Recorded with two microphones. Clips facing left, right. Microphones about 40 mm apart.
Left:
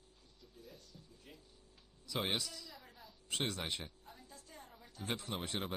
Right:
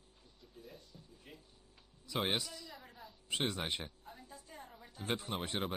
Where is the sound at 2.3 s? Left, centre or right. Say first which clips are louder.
Right 2 dB; centre.